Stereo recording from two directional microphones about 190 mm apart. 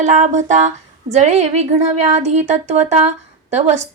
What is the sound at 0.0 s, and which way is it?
A woman's voice, 40° right (ahead or behind).